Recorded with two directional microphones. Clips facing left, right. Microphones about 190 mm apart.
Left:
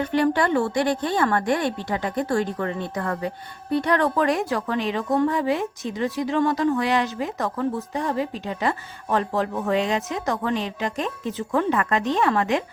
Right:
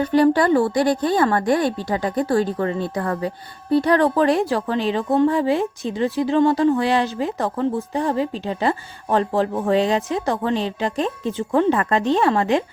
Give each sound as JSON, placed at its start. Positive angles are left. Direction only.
{"t": 0.0, "sound": "a woman's voice", "side_deg": -35}